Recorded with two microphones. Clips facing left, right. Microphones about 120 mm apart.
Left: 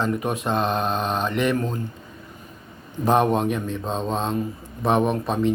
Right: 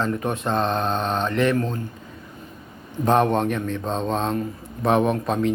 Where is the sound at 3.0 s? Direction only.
5° left (ahead or behind).